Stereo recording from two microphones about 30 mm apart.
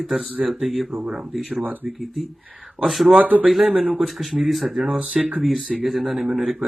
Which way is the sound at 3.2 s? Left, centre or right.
Right.